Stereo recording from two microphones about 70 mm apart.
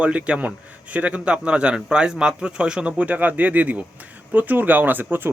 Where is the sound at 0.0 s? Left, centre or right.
Centre.